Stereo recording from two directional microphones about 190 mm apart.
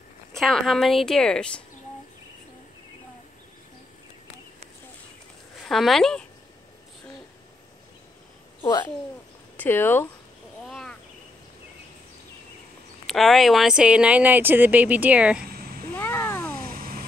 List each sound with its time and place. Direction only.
0.4 s speech: centre (ahead or behind)
5.6 s speech: centre (ahead or behind)
8.5 s speech: 20° left (ahead or behind)
9.6 s speech: 10° left (ahead or behind)
10.7 s cricket: centre (ahead or behind)
13.0 s speech: centre (ahead or behind)
15.9 s a sound: 15° left (ahead or behind)
16.5 s a sound: 50° right (ahead or behind)